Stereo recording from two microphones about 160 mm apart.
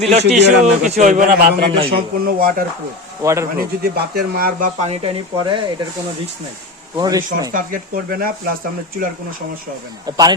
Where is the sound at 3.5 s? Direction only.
70° right (ahead or behind).